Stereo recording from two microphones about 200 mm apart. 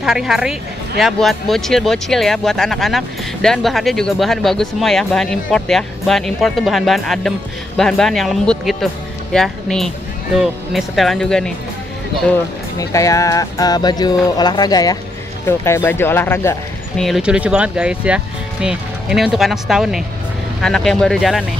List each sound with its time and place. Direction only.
0.0 s speech: centre (ahead or behind)
12.7 s speech: 15° left (ahead or behind); by 21.5 s centre (ahead or behind)